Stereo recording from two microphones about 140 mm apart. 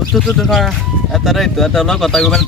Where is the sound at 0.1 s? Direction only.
Centre (ahead or behind).